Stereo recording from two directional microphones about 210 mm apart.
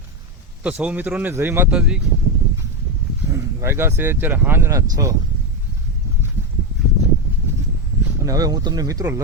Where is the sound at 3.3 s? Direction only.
15° right (ahead or behind).